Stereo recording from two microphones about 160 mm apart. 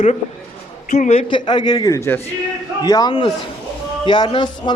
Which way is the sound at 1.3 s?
30° left (ahead or behind).